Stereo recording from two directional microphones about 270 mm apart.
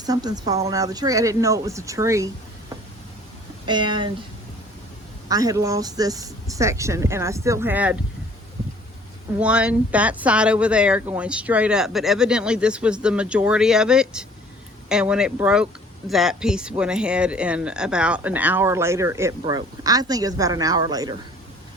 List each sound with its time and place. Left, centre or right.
0.0 s speech: centre
3.7 s speech: centre
5.3 s speech: centre
9.4 s speech: centre